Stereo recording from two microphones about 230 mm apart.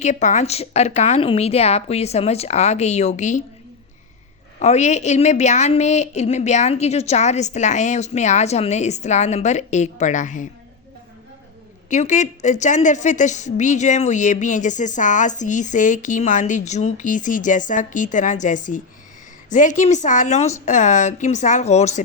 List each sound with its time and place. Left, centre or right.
0.0 s a woman's voice: left
4.6 s a woman's voice: left
11.9 s a woman's voice: left